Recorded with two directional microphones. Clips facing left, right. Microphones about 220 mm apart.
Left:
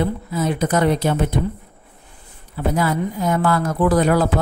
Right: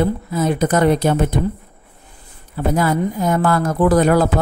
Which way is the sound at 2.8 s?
45° right (ahead or behind).